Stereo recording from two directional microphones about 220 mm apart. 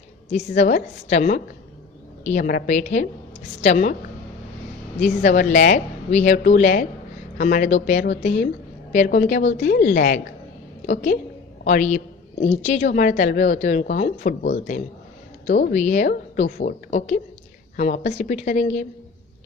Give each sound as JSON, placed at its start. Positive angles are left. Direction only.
{"t": 0.3, "sound": "a woman's voice", "side_deg": 30}
{"t": 5.2, "sound": "a woman's voice", "side_deg": 35}
{"t": 11.6, "sound": "a woman's voice", "side_deg": 35}
{"t": 15.4, "sound": "a woman's voice", "side_deg": 35}